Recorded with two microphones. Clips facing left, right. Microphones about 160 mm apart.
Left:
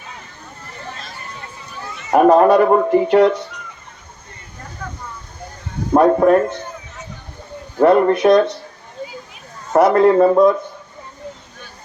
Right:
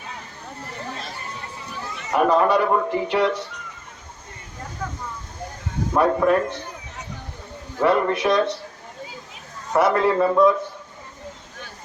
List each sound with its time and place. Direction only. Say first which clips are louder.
2.0 s speech: left 7 dB; 50° left (ahead or behind)
5.9 s speech: left 7 dB; 40° left (ahead or behind)
7.8 s speech: left 7 dB; 40° left (ahead or behind)
9.7 s speech: left 7 dB; 45° left (ahead or behind)